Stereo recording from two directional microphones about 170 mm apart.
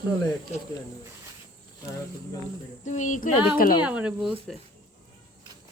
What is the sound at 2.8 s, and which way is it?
Speech, 45° left (ahead or behind).